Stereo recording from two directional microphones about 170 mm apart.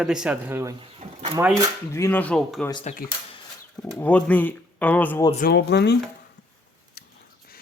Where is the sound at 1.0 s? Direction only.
40° right (ahead or behind).